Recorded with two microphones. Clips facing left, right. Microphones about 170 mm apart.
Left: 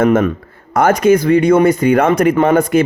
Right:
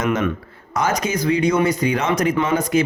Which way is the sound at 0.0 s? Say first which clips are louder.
Left 8 dB; 50° left (ahead or behind).